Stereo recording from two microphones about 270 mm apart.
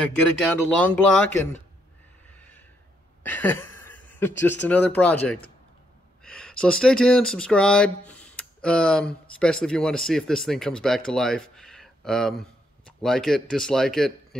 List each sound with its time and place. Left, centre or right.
0.0 s speech: centre
3.3 s a sound: centre
4.6 s speech: centre